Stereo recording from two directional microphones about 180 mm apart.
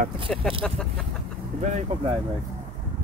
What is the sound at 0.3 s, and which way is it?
Speech, 5° left (ahead or behind).